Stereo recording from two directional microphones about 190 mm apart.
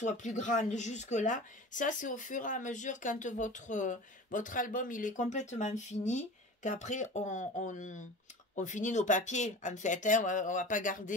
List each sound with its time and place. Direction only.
0.0 s speech: 40° left (ahead or behind)